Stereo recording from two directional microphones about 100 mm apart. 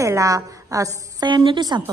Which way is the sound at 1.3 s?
50° right (ahead or behind).